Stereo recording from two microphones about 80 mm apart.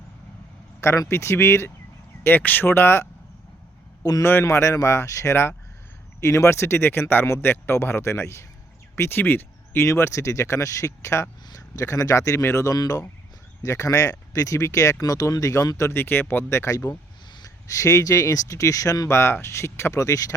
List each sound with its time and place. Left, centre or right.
0.8 s speech: left
4.2 s speech: left
12.7 s speech: left
15.9 s speech: left